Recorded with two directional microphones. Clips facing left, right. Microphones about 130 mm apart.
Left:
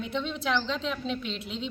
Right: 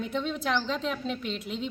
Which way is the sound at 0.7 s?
45° right (ahead or behind).